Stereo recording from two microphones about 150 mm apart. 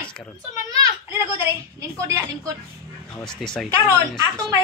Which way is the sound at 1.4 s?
20° right (ahead or behind).